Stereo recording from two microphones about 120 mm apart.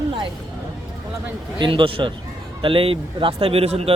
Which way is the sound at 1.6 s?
45° right (ahead or behind).